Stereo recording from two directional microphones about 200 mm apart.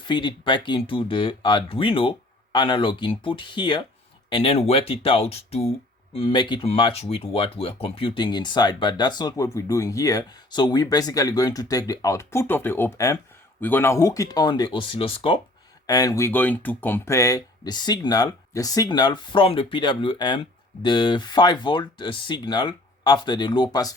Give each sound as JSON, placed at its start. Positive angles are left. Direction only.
{"t": 0.1, "sound": "speech", "side_deg": 25}